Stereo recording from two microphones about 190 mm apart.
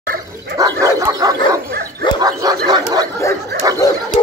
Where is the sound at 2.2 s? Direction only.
20° right (ahead or behind).